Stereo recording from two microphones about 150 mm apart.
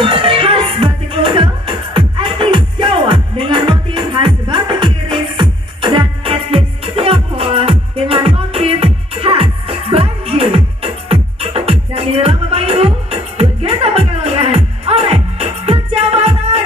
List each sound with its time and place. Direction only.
0.0 s music: 35° right (ahead or behind)